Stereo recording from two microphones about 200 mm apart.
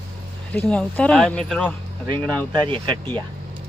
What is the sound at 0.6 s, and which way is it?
Speech, 5° left (ahead or behind).